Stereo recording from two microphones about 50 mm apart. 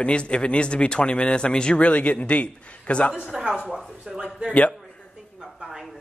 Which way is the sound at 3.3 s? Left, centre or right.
Centre.